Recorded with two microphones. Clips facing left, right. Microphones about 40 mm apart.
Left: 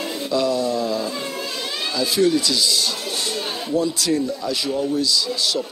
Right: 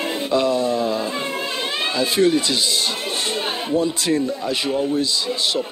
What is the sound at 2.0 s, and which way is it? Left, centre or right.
A man's voice, right.